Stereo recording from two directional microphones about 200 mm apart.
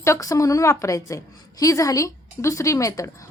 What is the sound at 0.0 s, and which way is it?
A woman's voice, 15° left (ahead or behind).